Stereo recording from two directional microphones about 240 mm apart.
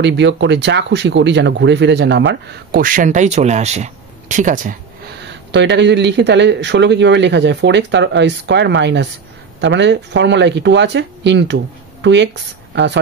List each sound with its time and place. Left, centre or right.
0.0 s speech: right
5.2 s speech: right